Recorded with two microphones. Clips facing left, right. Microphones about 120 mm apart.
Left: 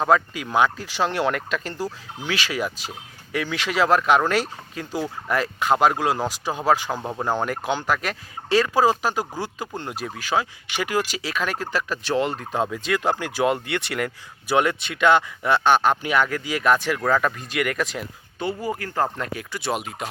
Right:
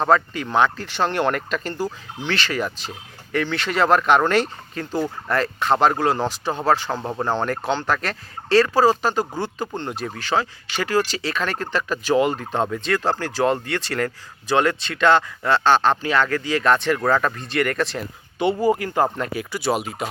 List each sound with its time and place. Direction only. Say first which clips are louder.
0.0 s speech: right 1 dB; 5° left (ahead or behind)
13.7 s speech: right 1 dB; 20° left (ahead or behind)
13.9 s speech: right 3 dB; 10° left (ahead or behind)
18.3 s speech: right 8 dB; 20° right (ahead or behind)
19.1 s speech: right 4 dB; 5° right (ahead or behind)